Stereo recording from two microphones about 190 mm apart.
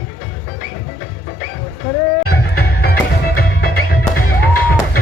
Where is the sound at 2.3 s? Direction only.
55° left (ahead or behind).